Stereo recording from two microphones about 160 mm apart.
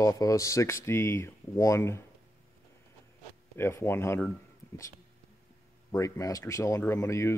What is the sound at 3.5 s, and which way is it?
Speech, 15° left (ahead or behind).